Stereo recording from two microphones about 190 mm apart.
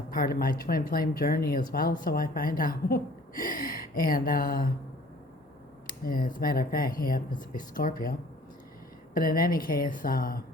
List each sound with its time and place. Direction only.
0.1 s a woman's voice: 50° left (ahead or behind)
5.9 s a woman's voice: 45° left (ahead or behind)
9.1 s a woman's voice: 50° left (ahead or behind)